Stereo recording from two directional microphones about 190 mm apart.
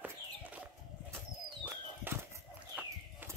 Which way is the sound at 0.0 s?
10° right (ahead or behind).